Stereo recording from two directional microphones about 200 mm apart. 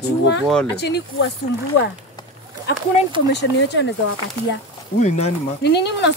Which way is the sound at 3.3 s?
60° left (ahead or behind).